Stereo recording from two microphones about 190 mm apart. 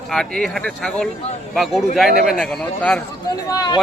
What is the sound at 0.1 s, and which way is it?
A man's voice, centre (ahead or behind).